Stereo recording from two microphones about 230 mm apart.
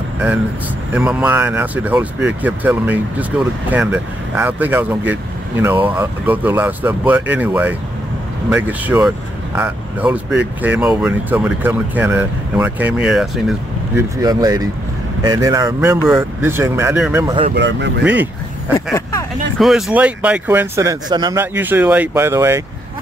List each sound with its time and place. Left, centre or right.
0.9 s speech: centre
14.1 s speech: centre
17.6 s speech: right
18.0 s speech: centre
19.6 s speech: centre